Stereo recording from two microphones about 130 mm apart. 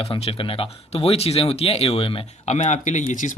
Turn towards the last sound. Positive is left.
turn(degrees=75)  # may be behind; listen again after turning